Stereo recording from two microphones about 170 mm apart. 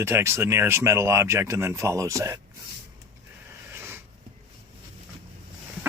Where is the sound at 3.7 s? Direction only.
15° right (ahead or behind).